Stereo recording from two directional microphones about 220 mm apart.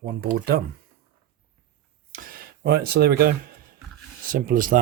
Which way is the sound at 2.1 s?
45° right (ahead or behind).